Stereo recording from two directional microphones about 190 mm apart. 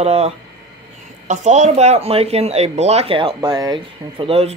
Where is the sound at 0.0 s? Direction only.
35° right (ahead or behind).